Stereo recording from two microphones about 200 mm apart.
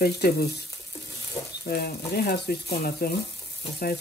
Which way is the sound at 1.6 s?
50° left (ahead or behind).